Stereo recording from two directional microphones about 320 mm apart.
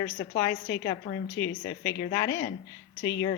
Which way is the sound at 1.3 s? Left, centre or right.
Left.